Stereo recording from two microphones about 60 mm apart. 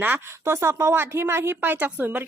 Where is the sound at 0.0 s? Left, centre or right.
Right.